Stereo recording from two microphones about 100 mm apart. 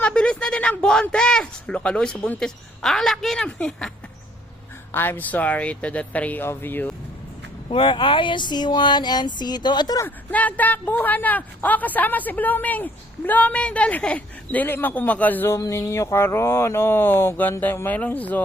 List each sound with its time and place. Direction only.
0.0 s a sound: 10° left (ahead or behind)
1.1 s a woman's voice: 10° left (ahead or behind)
4.9 s a woman's voice: 20° left (ahead or behind)
7.7 s speech: 55° left (ahead or behind)
10.3 s a woman's voice: 15° left (ahead or behind)